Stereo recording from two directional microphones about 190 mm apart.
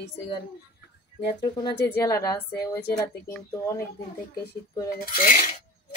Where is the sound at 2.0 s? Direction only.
15° left (ahead or behind).